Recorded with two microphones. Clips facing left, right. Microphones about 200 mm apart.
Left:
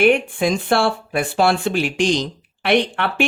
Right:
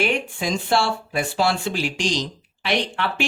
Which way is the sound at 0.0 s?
55° left (ahead or behind).